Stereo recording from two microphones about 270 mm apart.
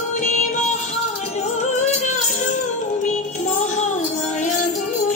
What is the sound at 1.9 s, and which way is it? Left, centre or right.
Music, left.